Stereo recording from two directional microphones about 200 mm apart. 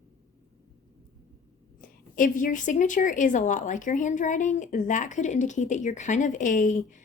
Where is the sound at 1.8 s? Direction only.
40° left (ahead or behind).